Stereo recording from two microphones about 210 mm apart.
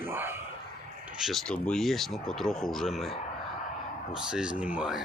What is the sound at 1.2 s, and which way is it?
Speech, centre (ahead or behind).